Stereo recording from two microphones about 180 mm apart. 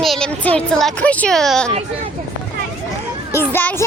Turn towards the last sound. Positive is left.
turn(degrees=10)  # may be behind; listen again after turning